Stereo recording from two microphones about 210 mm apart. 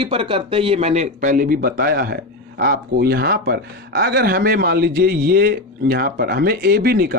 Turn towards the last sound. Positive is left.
turn(degrees=-45)  # may be behind; listen again after turning